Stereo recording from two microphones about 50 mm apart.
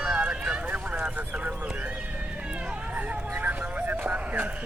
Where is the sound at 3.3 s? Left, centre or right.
Right.